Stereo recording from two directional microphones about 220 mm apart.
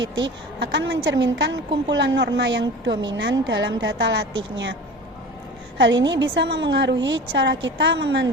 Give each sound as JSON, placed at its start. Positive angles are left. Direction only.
{"t": 0.0, "sound": "a woman's voice", "side_deg": -55}